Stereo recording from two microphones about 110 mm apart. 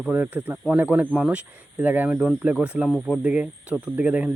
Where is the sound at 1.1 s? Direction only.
5° right (ahead or behind).